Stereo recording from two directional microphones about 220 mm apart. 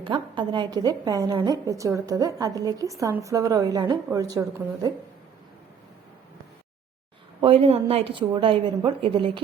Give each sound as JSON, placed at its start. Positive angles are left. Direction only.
{"t": 0.0, "sound": "a woman's voice", "side_deg": -20}
{"t": 7.4, "sound": "a woman's voice", "side_deg": -25}